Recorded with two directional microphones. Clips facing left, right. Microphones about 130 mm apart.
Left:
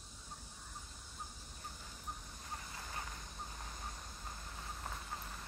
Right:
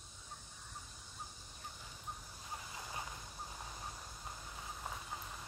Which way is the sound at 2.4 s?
15° right (ahead or behind).